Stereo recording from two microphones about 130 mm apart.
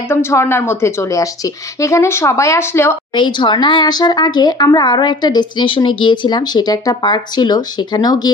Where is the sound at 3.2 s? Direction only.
35° left (ahead or behind).